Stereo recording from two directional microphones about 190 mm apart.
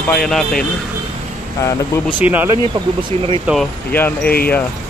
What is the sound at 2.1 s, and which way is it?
Speech, 10° right (ahead or behind).